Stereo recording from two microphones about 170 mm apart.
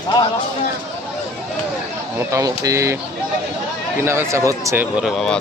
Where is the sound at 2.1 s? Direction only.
20° right (ahead or behind).